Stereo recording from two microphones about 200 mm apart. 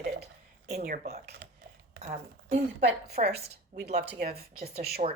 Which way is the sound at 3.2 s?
35° right (ahead or behind).